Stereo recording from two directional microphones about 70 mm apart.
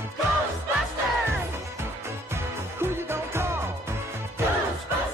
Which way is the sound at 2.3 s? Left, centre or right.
Right.